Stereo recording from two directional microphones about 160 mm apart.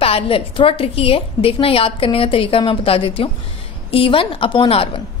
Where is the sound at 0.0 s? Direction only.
35° left (ahead or behind).